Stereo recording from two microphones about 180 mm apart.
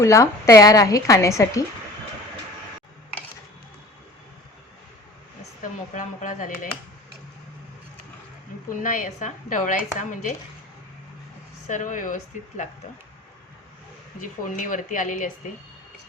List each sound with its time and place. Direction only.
0.0 s a woman's voice: 15° left (ahead or behind)
5.6 s speech: 45° left (ahead or behind)
8.7 s speech: 50° left (ahead or behind)
11.7 s speech: 45° left (ahead or behind)
14.2 s speech: 45° left (ahead or behind)